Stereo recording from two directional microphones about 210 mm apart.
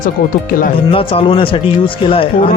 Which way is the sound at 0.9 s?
25° left (ahead or behind).